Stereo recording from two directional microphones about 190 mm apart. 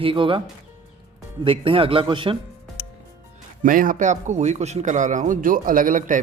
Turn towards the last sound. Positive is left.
turn(degrees=-45)  # may be behind; listen again after turning